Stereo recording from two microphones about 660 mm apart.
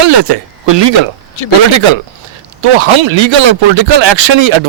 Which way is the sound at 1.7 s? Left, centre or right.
Right.